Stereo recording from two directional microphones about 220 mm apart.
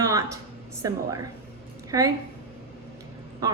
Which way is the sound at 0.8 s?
15° right (ahead or behind).